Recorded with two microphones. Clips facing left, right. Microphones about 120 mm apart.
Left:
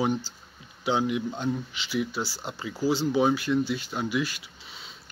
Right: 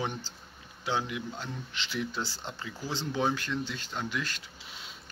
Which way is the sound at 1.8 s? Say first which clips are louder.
Left 5 dB; 5° left (ahead or behind).